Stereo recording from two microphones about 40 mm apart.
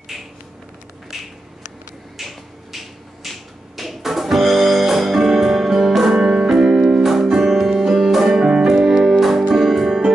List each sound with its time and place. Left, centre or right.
0.1 s a sound: centre
1.1 s finger snapping: centre
3.3 s music: centre